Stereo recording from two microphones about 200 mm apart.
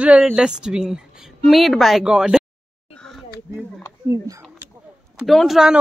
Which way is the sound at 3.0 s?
Centre (ahead or behind).